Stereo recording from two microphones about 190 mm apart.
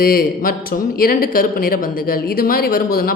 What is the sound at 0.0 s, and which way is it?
A man's voice, 50° left (ahead or behind).